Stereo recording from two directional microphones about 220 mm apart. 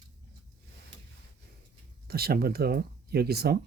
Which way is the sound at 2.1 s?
45° right (ahead or behind).